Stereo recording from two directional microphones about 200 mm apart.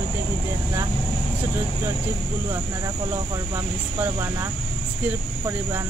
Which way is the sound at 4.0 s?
10° right (ahead or behind).